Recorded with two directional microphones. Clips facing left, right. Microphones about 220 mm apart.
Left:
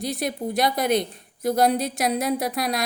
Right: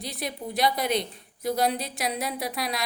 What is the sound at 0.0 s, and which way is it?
A woman's voice, 45° left (ahead or behind).